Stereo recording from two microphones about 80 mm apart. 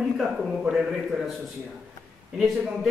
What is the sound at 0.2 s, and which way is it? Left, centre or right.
Speech, centre.